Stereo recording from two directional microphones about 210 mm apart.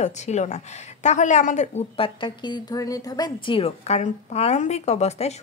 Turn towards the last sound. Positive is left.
turn(degrees=30)  # may be behind; listen again after turning